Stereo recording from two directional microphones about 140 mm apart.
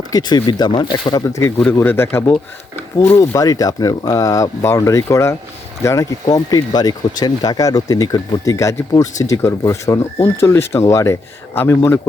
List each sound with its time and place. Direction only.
0.1 s speech: 30° left (ahead or behind)